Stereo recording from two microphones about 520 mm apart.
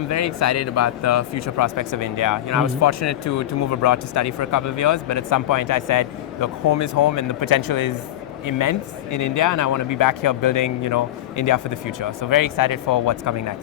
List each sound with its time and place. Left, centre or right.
0.1 s speech: left